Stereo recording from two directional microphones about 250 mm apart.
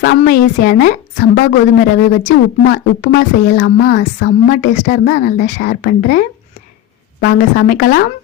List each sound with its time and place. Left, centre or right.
0.0 s a woman's voice: left